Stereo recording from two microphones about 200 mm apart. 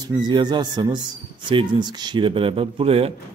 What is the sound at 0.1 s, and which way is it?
A man's voice, 20° right (ahead or behind).